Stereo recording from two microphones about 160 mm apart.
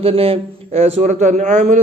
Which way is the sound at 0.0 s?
35° right (ahead or behind).